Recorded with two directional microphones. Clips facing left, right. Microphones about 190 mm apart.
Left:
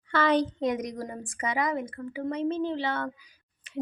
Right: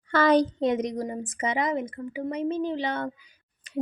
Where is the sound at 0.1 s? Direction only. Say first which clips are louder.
Right 4 dB; 40° right (ahead or behind); by 3.1 s 20° right (ahead or behind).